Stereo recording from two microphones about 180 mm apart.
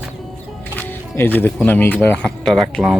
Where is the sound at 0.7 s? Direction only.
10° left (ahead or behind).